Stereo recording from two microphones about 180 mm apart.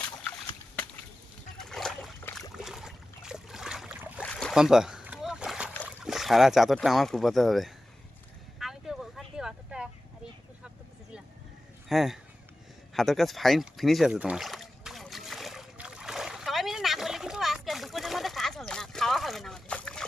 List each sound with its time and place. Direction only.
0.0 s a sound: 10° left (ahead or behind)
1.5 s boat: centre (ahead or behind)
4.2 s boat: 5° left (ahead or behind)
6.1 s speech: centre (ahead or behind)
8.5 s vehicle: centre (ahead or behind)
11.9 s speech: centre (ahead or behind)
12.9 s a sound: centre (ahead or behind)